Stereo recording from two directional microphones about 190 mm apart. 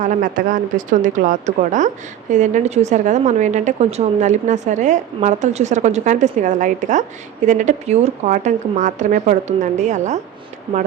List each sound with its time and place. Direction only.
0.0 s a woman's voice: 45° right (ahead or behind)